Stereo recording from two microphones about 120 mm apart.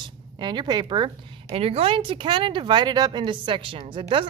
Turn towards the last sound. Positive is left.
turn(degrees=-45)  # may be behind; listen again after turning